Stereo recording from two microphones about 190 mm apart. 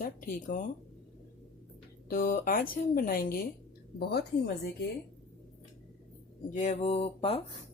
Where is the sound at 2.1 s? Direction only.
50° left (ahead or behind).